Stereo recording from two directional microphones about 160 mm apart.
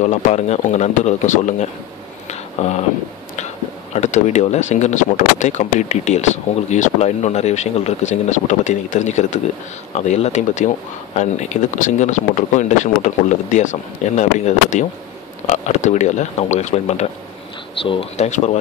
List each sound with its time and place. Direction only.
0.0 s speech: 45° left (ahead or behind)
2.2 s a sound: 45° left (ahead or behind)
3.9 s speech: 45° left (ahead or behind)